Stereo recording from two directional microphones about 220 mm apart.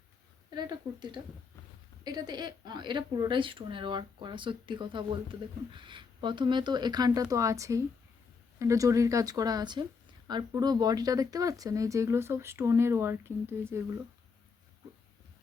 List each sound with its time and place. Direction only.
0.5 s a woman's voice: 20° right (ahead or behind)